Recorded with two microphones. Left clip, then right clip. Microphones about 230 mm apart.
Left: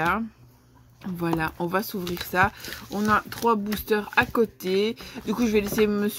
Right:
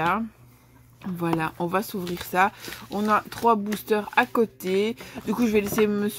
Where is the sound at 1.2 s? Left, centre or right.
Centre.